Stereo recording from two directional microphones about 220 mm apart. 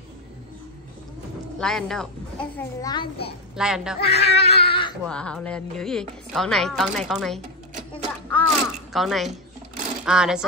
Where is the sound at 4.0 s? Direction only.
50° left (ahead or behind).